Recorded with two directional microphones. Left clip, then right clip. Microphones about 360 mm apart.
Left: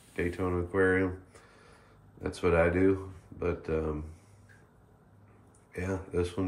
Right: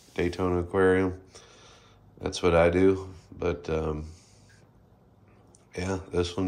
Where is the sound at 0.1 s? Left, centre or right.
Centre.